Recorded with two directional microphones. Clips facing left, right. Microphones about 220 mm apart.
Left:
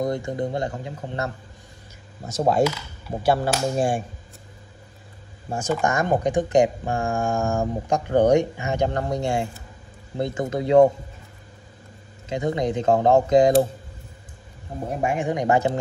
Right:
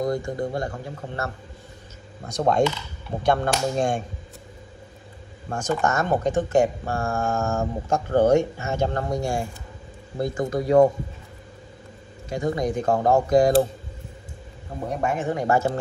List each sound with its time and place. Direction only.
0.0 s speech: 25° left (ahead or behind)
2.2 s speech: 5° left (ahead or behind)
5.5 s speech: 10° left (ahead or behind)
12.3 s speech: 20° left (ahead or behind)
15.0 s speech: 15° left (ahead or behind)